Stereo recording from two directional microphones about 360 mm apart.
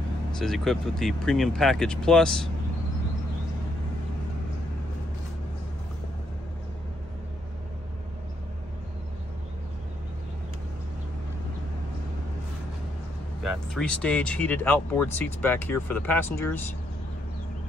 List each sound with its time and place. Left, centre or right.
0.4 s speech: centre
13.4 s speech: centre